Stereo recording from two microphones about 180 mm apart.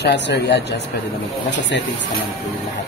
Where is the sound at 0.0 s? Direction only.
70° left (ahead or behind).